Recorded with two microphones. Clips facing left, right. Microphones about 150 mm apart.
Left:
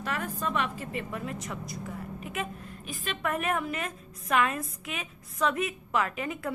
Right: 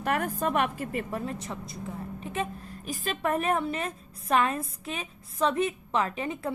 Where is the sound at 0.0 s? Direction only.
55° right (ahead or behind).